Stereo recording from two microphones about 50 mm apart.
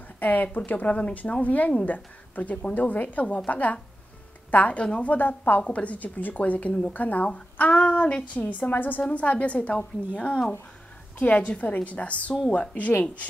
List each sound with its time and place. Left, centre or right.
0.2 s a woman's voice: left
5.1 s a woman's voice: left
5.6 s a woman's voice: left